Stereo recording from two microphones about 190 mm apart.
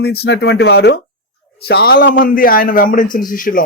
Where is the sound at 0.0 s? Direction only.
55° left (ahead or behind).